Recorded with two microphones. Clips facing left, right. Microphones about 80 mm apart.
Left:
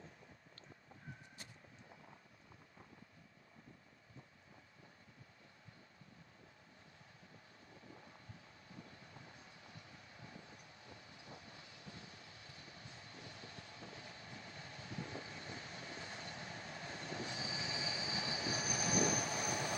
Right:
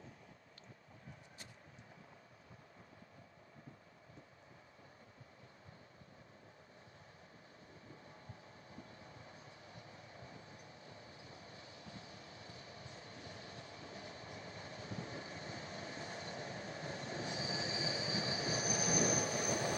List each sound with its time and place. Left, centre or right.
9.6 s vehicle: right